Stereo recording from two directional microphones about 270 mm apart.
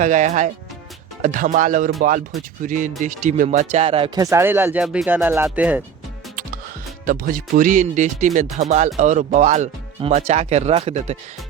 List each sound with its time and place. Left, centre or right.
0.0 s speech: right; by 5.8 s centre
7.0 s speech: right